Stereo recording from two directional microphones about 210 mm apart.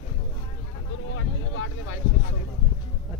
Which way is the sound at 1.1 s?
70° left (ahead or behind).